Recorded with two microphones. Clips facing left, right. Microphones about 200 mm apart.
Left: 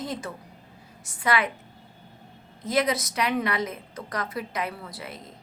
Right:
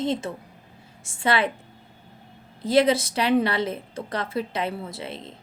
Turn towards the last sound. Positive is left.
turn(degrees=-25)  # may be behind; listen again after turning